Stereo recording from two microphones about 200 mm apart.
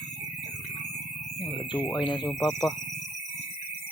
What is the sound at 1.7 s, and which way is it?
Speech, 20° left (ahead or behind).